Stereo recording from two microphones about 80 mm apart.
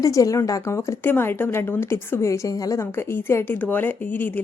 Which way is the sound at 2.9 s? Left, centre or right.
Left.